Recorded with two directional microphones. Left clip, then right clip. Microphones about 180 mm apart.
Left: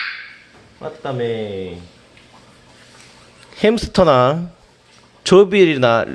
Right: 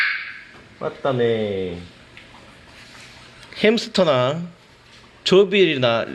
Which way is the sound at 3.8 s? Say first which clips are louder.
Left 5 dB; 25° left (ahead or behind).